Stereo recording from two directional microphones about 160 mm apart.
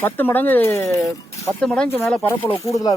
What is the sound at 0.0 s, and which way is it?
Speech, 10° left (ahead or behind).